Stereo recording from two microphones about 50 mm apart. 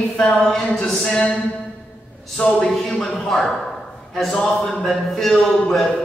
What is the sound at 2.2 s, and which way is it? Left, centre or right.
A man's voice, centre.